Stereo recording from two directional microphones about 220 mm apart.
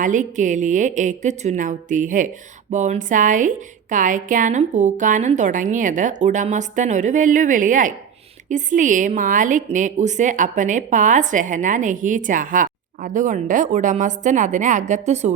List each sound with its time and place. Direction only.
0.0 s a woman's voice: 35° right (ahead or behind)